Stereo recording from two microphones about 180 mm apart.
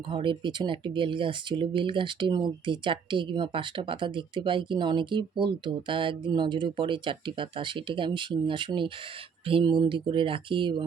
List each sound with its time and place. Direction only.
0.1 s speech: 30° right (ahead or behind)